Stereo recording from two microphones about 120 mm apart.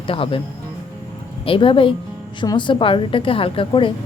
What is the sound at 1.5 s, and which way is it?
A woman's voice, 45° left (ahead or behind).